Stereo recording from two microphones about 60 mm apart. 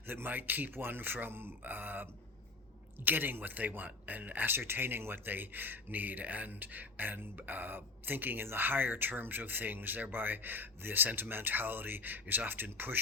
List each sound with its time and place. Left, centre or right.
0.1 s speech: right